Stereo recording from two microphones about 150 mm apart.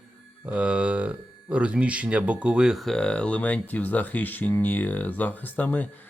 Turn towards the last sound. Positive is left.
turn(degrees=10)  # may be behind; listen again after turning